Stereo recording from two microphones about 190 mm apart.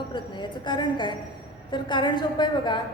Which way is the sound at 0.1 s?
25° left (ahead or behind).